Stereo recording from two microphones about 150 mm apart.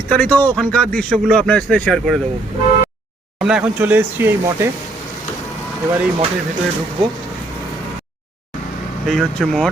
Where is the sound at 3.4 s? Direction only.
5° right (ahead or behind).